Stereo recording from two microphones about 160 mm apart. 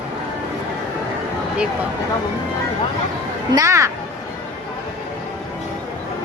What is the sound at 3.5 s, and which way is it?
Speech, 20° right (ahead or behind).